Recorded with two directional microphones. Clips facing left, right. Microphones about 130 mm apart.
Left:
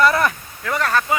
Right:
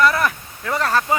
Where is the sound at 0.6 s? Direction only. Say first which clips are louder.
Even; 30° right (ahead or behind).